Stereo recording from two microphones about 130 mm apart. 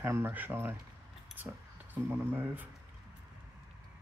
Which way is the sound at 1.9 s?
15° right (ahead or behind).